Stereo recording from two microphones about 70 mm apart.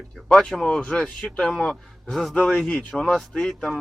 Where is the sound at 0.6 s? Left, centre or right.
Centre.